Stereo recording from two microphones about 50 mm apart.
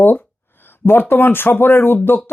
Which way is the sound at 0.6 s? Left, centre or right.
Left.